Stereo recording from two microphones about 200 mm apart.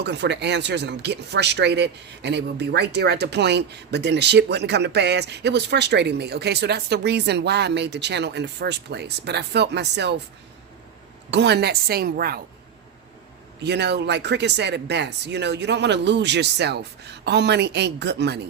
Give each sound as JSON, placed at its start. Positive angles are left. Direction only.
{"t": 0.0, "sound": "speech", "side_deg": -60}
{"t": 11.3, "sound": "a woman's voice", "side_deg": -60}
{"t": 13.6, "sound": "speech", "side_deg": -55}